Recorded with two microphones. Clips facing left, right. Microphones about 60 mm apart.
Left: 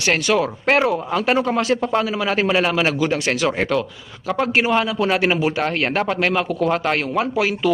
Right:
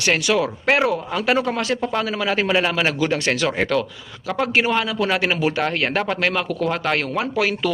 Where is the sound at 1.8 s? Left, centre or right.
Left.